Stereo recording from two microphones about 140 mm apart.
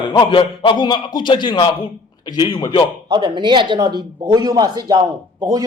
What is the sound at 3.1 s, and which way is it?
A man's voice, 30° right (ahead or behind).